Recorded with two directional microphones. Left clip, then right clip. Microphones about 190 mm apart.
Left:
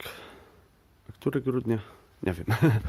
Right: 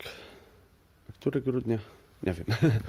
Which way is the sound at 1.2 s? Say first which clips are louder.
Left 1 dB; 20° left (ahead or behind).